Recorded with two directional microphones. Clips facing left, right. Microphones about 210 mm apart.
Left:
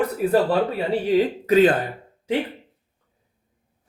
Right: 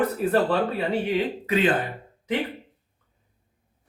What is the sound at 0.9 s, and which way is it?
Speech, 40° left (ahead or behind).